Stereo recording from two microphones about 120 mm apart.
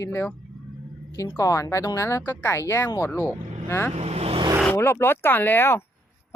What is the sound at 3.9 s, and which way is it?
Speech, 60° right (ahead or behind).